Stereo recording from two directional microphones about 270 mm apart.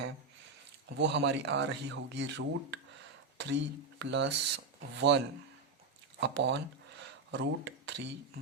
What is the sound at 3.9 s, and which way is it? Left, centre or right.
Speech, right.